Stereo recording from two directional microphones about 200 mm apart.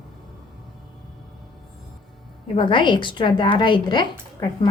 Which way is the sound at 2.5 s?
25° left (ahead or behind).